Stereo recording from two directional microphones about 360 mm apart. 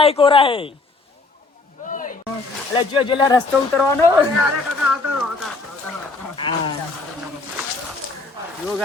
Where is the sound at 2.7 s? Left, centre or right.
Centre.